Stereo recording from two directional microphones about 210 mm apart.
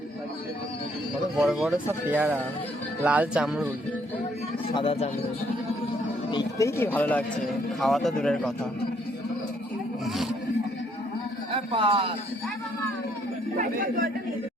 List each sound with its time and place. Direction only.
1.4 s speech: centre (ahead or behind)
4.7 s speech: 25° left (ahead or behind)
6.3 s speech: 15° left (ahead or behind)
11.5 s a man's voice: 25° right (ahead or behind)
13.6 s speech: 45° right (ahead or behind)